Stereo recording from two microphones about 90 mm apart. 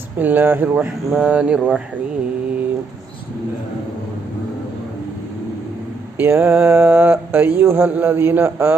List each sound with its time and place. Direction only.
0.2 s mantra: 20° right (ahead or behind)
0.8 s speech: 10° right (ahead or behind)
6.1 s mantra: 25° right (ahead or behind)